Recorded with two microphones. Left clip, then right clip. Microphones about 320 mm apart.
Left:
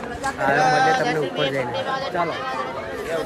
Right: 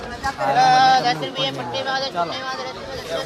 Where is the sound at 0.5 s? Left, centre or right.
Right.